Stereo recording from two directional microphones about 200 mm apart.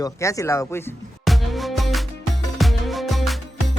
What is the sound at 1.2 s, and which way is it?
Music, centre (ahead or behind).